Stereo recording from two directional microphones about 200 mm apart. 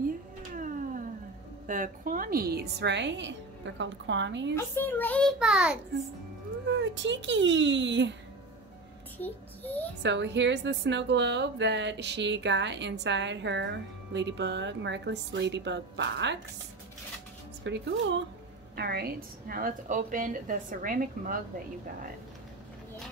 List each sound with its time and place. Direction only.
0.6 s cat: 40° right (ahead or behind)
1.7 s a woman's voice: 40° right (ahead or behind); by 4.6 s 65° right (ahead or behind)
4.6 s a child's voice: 10° left (ahead or behind)
6.7 s a woman's voice: 65° right (ahead or behind)
9.2 s a child's voice: 10° left (ahead or behind)
10.0 s a woman's voice: 60° right (ahead or behind)
17.6 s a woman's voice: 60° right (ahead or behind)
18.8 s a woman's voice: 50° right (ahead or behind)